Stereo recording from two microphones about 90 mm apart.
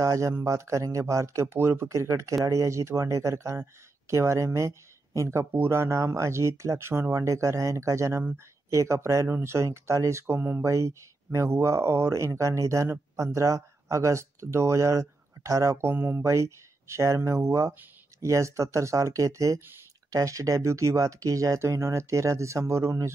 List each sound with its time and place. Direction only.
0.0 s speech: 35° right (ahead or behind)